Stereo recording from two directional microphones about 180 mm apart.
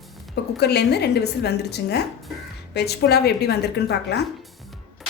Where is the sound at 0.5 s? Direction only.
65° left (ahead or behind).